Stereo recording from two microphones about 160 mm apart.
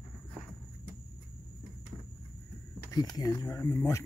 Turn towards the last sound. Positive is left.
turn(degrees=15)  # may be behind; listen again after turning